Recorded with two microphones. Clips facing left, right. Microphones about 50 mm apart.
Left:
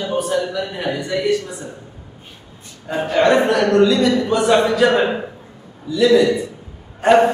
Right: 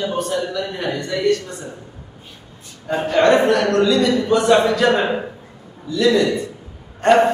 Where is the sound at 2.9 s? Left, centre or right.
Centre.